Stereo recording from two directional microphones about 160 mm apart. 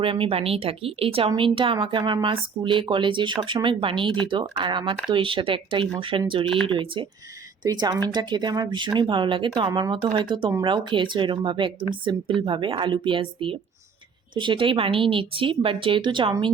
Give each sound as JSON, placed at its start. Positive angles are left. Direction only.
{"t": 0.0, "sound": "speech", "side_deg": -35}